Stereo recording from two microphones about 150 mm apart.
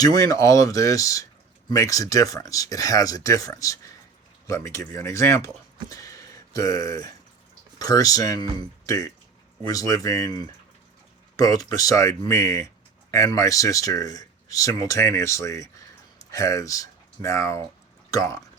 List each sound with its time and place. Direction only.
0.0 s speech: 25° left (ahead or behind)